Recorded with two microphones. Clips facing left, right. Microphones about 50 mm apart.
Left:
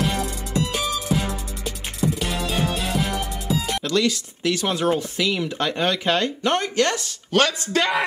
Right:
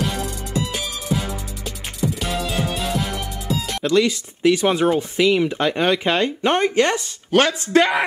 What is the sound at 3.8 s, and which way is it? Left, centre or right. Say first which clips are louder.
Speech: right 7 dB; centre.